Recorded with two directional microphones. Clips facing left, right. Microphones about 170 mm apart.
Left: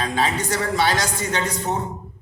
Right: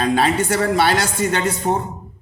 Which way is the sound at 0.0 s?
60° right (ahead or behind).